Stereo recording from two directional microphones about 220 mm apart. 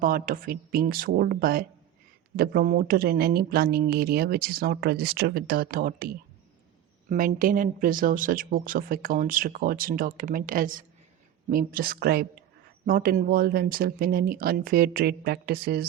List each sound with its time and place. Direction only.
0.0 s a woman's voice: 40° right (ahead or behind)